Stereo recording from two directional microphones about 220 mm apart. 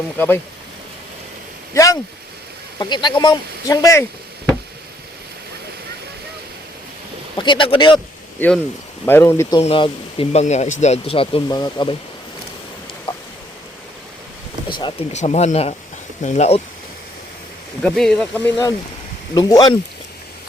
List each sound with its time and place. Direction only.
1.7 s speech: 15° left (ahead or behind)
7.3 s speech: 20° left (ahead or behind)
8.4 s speech: 5° left (ahead or behind)
9.6 s speech: 25° left (ahead or behind)
14.7 s speech: 20° left (ahead or behind)
17.8 s speech: 5° left (ahead or behind)